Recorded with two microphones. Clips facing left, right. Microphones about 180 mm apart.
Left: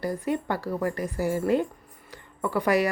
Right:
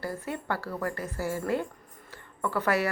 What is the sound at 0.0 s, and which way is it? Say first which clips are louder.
Speech: left 7 dB; 15° left (ahead or behind).